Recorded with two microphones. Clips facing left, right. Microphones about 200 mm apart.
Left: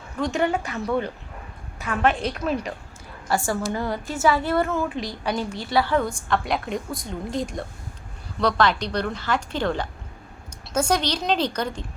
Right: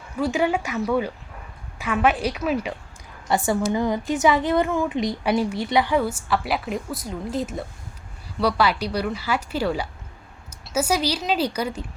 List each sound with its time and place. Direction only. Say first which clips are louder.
0.2 s a woman's voice: right 1 dB; 5° right (ahead or behind)
3.2 s a woman's voice: right 3 dB; 20° right (ahead or behind)
5.2 s a woman's voice: right 4 dB; 5° right (ahead or behind)
5.5 s a woman's voice: right 1 dB; 20° right (ahead or behind)